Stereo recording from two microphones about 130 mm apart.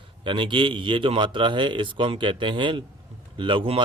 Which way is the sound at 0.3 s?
40° right (ahead or behind).